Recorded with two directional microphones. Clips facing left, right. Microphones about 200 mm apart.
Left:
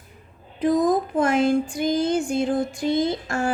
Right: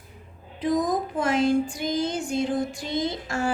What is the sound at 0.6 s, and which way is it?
A woman's voice, 50° left (ahead or behind).